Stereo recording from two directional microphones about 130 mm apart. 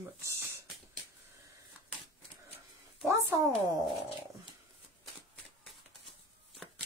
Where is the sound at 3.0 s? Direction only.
25° right (ahead or behind).